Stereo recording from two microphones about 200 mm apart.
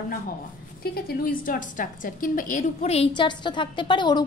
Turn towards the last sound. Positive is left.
turn(degrees=25)  # may be behind; listen again after turning